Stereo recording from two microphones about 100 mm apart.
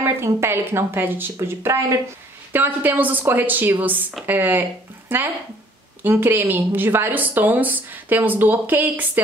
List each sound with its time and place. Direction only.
0.0 s a woman's voice: 25° right (ahead or behind)